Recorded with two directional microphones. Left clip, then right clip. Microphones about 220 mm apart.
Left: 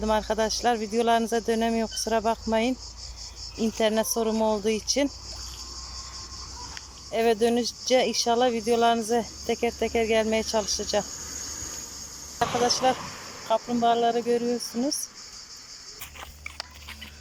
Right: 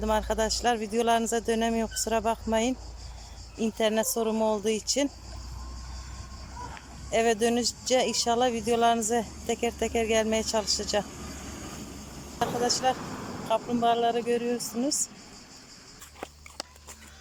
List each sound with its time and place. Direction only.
0.0 s speech: centre (ahead or behind)
7.1 s speech: centre (ahead or behind)
11.1 s vehicle: 50° right (ahead or behind)
13.0 s vehicle: 45° right (ahead or behind)
13.5 s speech: centre (ahead or behind)